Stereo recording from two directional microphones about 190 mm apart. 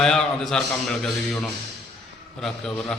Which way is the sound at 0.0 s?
5° left (ahead or behind).